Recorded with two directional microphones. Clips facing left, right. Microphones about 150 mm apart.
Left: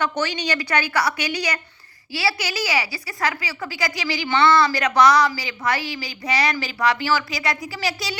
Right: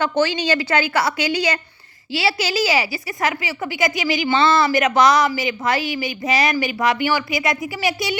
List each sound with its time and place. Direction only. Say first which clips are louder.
0.2 s a woman's voice: right 6 dB; 30° right (ahead or behind)